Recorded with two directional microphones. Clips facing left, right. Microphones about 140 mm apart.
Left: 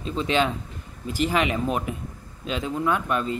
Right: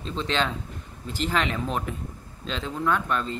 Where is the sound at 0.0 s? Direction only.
10° left (ahead or behind).